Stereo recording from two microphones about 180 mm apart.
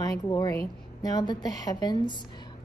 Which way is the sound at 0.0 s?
20° left (ahead or behind).